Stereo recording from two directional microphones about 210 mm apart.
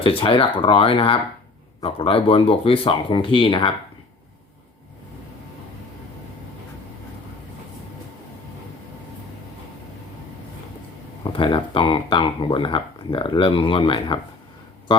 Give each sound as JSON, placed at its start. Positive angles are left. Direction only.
{"t": 0.0, "sound": "speech", "side_deg": 25}
{"t": 11.2, "sound": "speech", "side_deg": 25}